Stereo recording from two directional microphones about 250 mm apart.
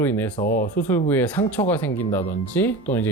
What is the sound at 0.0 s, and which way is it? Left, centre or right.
Speech, centre.